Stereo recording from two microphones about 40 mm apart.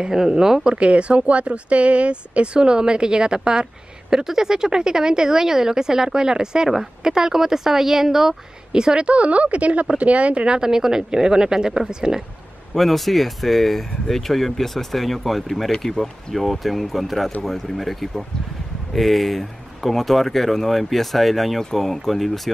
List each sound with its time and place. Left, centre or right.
0.0 s speech: centre
0.7 s speech: right; by 8.4 s centre
8.7 s a woman's voice: right
12.7 s speech: centre